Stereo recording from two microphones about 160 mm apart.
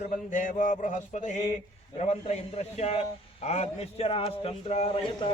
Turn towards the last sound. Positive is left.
turn(degrees=30)  # may be behind; listen again after turning